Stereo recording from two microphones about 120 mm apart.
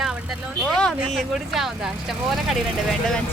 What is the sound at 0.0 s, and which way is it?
Vehicle, 5° right (ahead or behind).